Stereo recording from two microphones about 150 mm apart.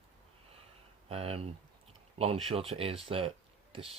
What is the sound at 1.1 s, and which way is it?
Speech, 40° right (ahead or behind).